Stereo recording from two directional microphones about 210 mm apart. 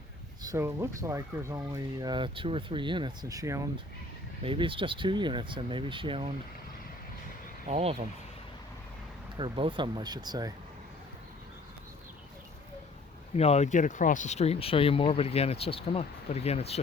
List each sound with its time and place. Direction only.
0.4 s speech: 15° right (ahead or behind)
7.7 s speech: 30° right (ahead or behind)
9.4 s speech: 25° right (ahead or behind)
13.3 s speech: 30° left (ahead or behind)